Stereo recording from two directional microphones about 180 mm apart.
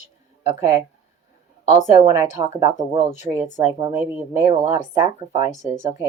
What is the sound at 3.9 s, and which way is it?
Speech, 15° right (ahead or behind).